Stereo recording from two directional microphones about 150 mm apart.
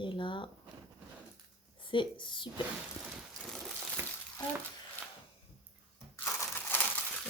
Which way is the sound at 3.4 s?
Centre (ahead or behind).